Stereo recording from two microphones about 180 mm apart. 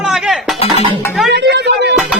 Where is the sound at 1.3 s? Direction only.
70° right (ahead or behind).